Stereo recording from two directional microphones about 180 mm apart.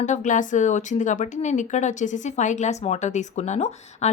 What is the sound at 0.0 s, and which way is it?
A woman's voice, 45° left (ahead or behind).